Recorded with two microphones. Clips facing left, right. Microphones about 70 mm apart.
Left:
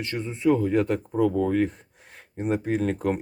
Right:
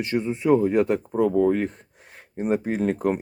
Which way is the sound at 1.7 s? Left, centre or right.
Centre.